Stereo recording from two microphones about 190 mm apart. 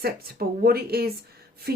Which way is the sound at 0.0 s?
55° right (ahead or behind).